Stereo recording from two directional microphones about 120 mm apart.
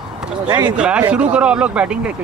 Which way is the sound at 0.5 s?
35° right (ahead or behind).